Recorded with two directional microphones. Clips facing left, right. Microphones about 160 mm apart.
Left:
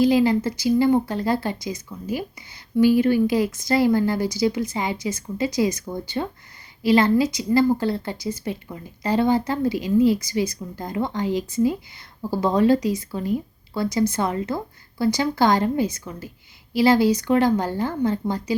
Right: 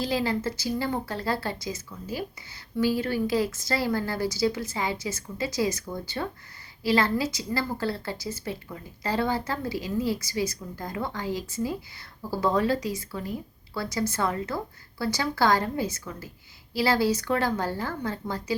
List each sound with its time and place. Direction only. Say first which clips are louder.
0.0 s speech: left 9 dB; 15° left (ahead or behind)